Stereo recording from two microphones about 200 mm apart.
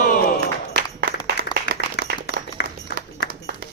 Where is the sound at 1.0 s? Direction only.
50° right (ahead or behind).